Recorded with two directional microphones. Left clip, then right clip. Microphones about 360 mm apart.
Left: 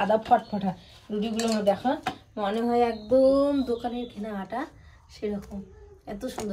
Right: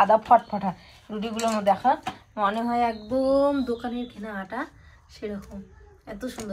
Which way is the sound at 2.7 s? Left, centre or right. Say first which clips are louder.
Left 2 dB; centre.